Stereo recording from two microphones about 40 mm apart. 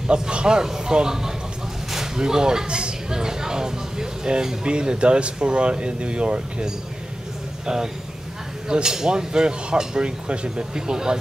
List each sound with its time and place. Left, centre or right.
0.0 s a man's voice: right
7.6 s a man's voice: centre